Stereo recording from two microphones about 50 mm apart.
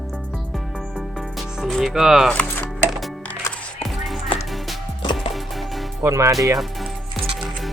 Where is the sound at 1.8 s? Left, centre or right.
Centre.